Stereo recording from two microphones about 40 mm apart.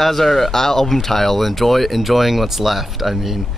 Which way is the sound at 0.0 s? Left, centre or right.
Centre.